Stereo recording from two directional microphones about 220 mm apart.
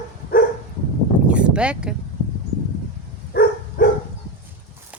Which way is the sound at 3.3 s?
45° left (ahead or behind).